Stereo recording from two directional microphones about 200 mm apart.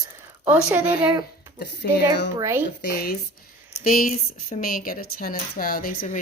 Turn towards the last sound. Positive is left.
turn(degrees=40)  # may be behind; listen again after turning